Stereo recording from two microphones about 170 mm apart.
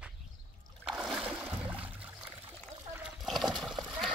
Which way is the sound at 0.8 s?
Centre (ahead or behind).